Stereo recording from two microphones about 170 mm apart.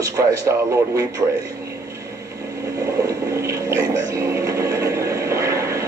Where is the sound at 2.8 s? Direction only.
20° right (ahead or behind).